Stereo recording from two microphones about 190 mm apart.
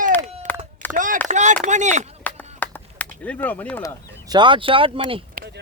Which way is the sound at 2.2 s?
10° left (ahead or behind).